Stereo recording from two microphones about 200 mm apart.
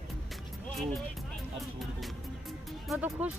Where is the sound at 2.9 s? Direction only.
5° right (ahead or behind).